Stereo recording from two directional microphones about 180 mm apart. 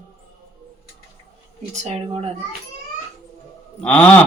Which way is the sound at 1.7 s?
35° right (ahead or behind).